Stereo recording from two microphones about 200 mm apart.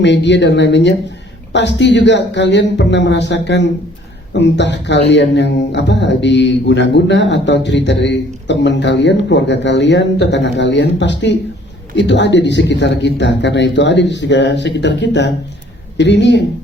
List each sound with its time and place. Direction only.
0.0 s speech: 60° left (ahead or behind)